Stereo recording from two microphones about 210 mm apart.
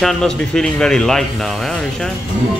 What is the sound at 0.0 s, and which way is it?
Speech, centre (ahead or behind).